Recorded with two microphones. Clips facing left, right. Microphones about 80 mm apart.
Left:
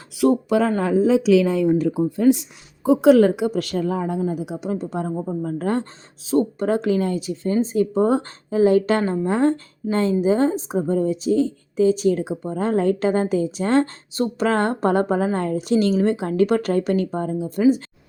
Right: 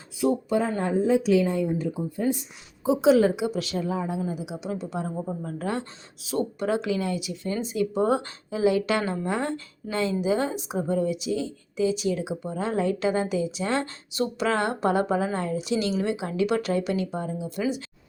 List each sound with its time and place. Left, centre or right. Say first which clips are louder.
0.2 s speech: left 6 dB; left
2.8 s a woman's voice: left 6 dB; left